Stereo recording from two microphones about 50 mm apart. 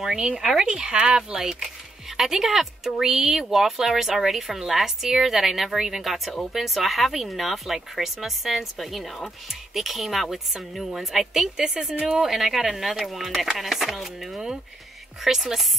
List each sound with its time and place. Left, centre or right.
0.0 s speech: centre
11.9 s a woman's voice: right
12.2 s speech: centre